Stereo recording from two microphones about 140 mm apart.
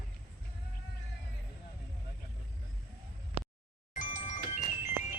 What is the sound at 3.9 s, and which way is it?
Music, 65° left (ahead or behind).